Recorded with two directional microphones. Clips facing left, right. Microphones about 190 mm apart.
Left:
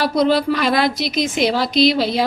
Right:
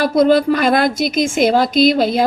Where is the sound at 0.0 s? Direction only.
50° right (ahead or behind).